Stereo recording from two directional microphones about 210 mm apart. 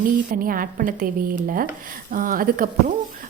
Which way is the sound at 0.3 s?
40° right (ahead or behind).